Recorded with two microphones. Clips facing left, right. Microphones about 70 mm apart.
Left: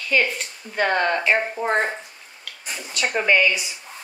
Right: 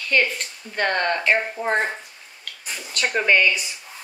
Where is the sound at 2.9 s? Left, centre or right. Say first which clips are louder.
Even; centre.